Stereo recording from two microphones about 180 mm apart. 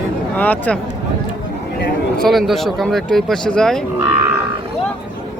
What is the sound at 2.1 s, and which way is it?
Speech, centre (ahead or behind).